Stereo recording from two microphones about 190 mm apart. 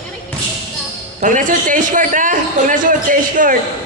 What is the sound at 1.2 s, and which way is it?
A man's voice, 45° right (ahead or behind).